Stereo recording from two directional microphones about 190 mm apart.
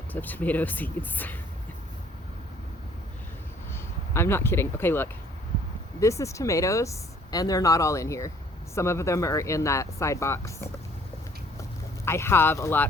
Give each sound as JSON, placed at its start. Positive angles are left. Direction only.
{"t": 0.1, "sound": "speech", "side_deg": 10}
{"t": 4.1, "sound": "speech", "side_deg": 15}
{"t": 12.0, "sound": "speech", "side_deg": 15}